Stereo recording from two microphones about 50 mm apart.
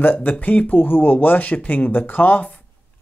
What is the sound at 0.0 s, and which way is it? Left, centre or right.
Speech, left.